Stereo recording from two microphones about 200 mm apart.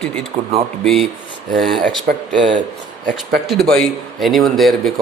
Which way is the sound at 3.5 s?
Centre (ahead or behind).